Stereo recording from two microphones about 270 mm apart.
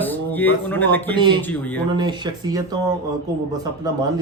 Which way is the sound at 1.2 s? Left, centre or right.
Centre.